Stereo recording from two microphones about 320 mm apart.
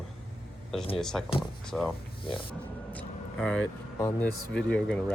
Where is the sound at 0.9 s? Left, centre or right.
Centre.